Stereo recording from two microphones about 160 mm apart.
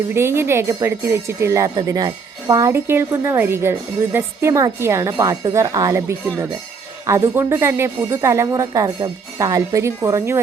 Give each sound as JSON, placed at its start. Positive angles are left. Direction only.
{"t": 0.1, "sound": "speech", "side_deg": -15}